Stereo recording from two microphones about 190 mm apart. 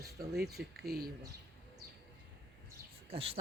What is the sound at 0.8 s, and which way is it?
Speech, 55° right (ahead or behind).